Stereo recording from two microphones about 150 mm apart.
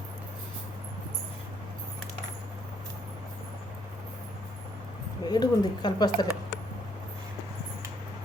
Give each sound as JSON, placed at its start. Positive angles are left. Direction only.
{"t": 5.2, "sound": "speech", "side_deg": 30}